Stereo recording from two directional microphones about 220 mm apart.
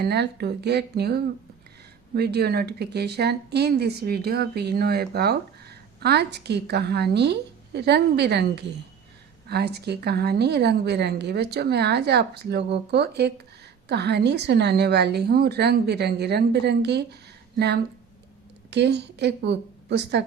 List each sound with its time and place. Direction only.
0.0 s a woman's voice: 45° right (ahead or behind)
18.7 s a woman's voice: 50° right (ahead or behind)